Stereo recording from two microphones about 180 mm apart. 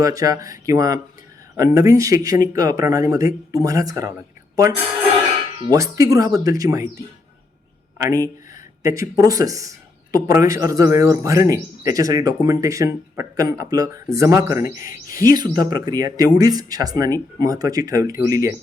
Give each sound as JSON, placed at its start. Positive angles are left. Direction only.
{"t": 0.0, "sound": "speech", "side_deg": -20}